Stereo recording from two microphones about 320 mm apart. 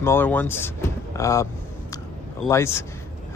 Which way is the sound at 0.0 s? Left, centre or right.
Centre.